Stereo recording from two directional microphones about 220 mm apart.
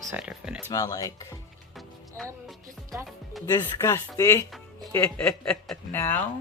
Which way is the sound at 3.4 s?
20° left (ahead or behind).